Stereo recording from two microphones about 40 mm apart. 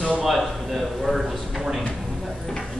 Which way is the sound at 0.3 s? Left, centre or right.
Centre.